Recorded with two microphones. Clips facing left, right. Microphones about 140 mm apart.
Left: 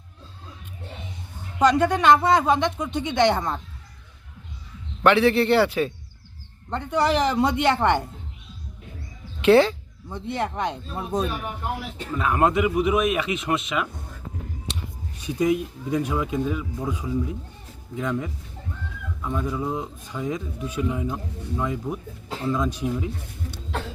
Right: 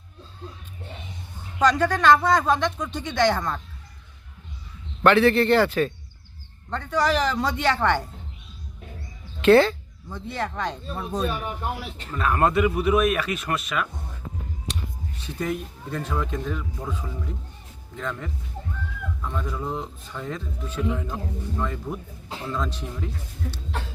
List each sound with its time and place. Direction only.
1.5 s speech: 15° left (ahead or behind)
5.0 s a man's voice: 10° left (ahead or behind)
9.4 s speech: 15° left (ahead or behind)
15.2 s speech: 10° left (ahead or behind)